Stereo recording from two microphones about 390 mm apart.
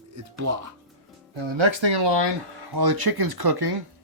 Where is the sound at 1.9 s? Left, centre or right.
Right.